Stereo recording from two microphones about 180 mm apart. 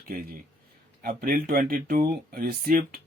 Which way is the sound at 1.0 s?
50° right (ahead or behind).